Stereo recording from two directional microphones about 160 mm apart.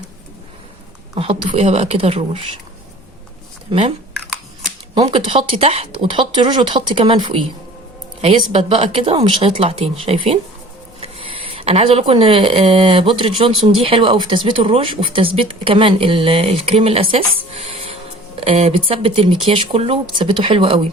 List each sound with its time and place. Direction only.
1.1 s a woman's voice: 35° right (ahead or behind)
3.7 s speech: 40° right (ahead or behind)
4.9 s speech: 35° right (ahead or behind)